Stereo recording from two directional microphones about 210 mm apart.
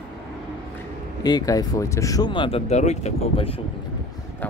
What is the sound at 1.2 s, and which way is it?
Speech, 20° left (ahead or behind).